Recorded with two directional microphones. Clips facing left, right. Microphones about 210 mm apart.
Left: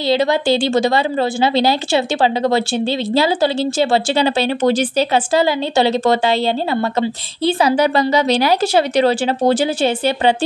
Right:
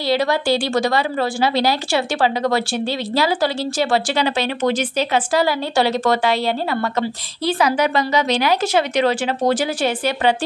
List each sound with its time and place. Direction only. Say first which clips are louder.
0.0 s speech: left 3 dB; 25° left (ahead or behind)